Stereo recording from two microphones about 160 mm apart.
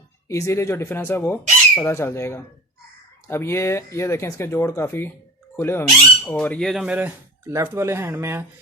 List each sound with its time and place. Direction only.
0.3 s speech: 20° left (ahead or behind); by 8.4 s 15° right (ahead or behind)